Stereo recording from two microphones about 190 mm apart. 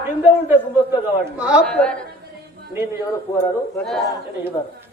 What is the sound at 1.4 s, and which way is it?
Speech, 5° right (ahead or behind).